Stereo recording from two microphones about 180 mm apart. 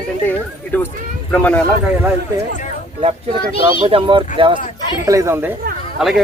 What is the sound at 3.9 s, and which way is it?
Speech, 30° right (ahead or behind).